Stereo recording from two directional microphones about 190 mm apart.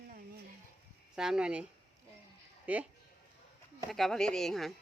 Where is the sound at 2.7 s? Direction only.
10° right (ahead or behind).